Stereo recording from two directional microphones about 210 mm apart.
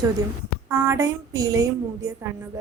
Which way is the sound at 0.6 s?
15° right (ahead or behind).